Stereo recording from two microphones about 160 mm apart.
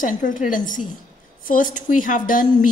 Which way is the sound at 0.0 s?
55° left (ahead or behind).